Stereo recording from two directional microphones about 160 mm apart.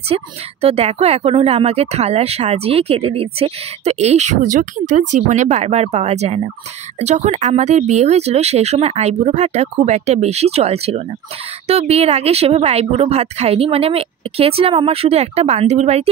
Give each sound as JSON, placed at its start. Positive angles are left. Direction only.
{"t": 0.1, "sound": "speech", "side_deg": -40}